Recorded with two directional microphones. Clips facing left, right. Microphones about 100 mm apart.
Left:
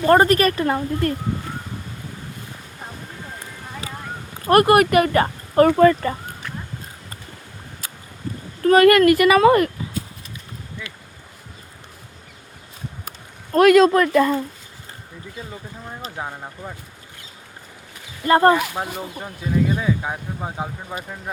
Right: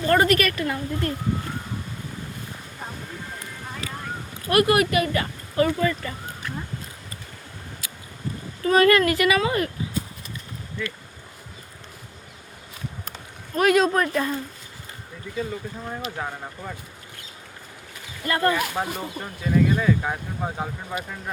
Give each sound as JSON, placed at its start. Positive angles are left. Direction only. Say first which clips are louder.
{"t": 0.0, "sound": "speech", "louder": "left 5 dB", "side_deg": 35}
{"t": 4.4, "sound": "speech", "louder": "left 5 dB", "side_deg": 45}
{"t": 7.8, "sound": "a sound", "louder": "left 3 dB", "side_deg": 40}
{"t": 8.6, "sound": "speech", "louder": "left 5 dB", "side_deg": 60}
{"t": 10.8, "sound": "speech", "louder": "right 8 dB", "side_deg": 15}
{"t": 13.5, "sound": "speech", "louder": "left 7 dB", "side_deg": 80}
{"t": 16.1, "sound": "speech", "louder": "left 1 dB", "side_deg": 15}
{"t": 18.3, "sound": "speech", "louder": "left 8 dB", "side_deg": 35}
{"t": 18.7, "sound": "speech", "louder": "even", "side_deg": 5}